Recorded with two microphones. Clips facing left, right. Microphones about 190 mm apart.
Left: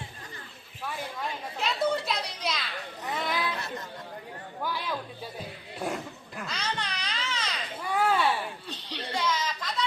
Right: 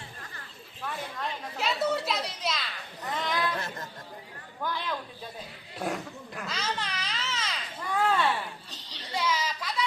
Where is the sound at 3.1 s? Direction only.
10° left (ahead or behind).